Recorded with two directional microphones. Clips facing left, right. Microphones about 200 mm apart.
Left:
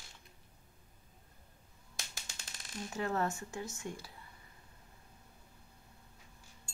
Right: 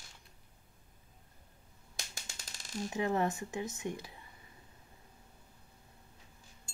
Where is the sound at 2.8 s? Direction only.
15° right (ahead or behind).